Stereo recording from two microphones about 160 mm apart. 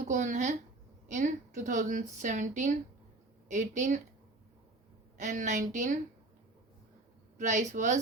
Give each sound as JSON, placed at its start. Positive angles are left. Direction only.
{"t": 0.0, "sound": "a woman's voice", "side_deg": -50}
{"t": 5.1, "sound": "a woman's voice", "side_deg": -50}
{"t": 7.3, "sound": "a woman's voice", "side_deg": -50}